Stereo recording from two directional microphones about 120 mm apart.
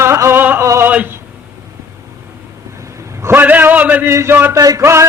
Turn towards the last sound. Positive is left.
turn(degrees=-25)  # may be behind; listen again after turning